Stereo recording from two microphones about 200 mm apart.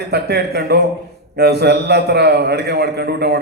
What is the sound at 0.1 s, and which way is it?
A man's voice, 55° right (ahead or behind).